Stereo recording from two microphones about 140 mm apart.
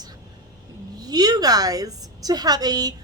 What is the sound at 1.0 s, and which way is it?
A woman's voice, 30° right (ahead or behind).